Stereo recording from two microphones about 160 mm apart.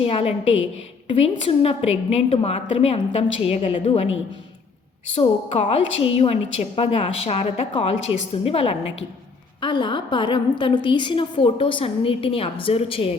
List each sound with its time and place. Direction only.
0.0 s a woman's voice: 35° left (ahead or behind)
5.1 s a woman's voice: 40° left (ahead or behind)